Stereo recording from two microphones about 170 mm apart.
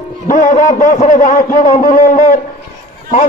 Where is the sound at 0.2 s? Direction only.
50° left (ahead or behind).